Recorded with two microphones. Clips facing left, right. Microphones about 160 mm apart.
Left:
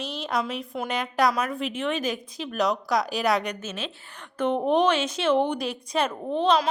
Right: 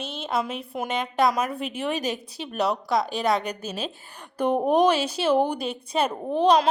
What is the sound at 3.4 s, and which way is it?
Speech, 35° right (ahead or behind).